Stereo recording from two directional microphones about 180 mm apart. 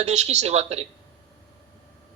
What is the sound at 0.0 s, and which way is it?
Speech, 40° right (ahead or behind).